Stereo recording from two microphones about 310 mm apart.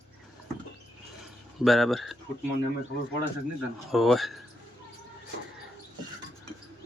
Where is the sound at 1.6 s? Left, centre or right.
Centre.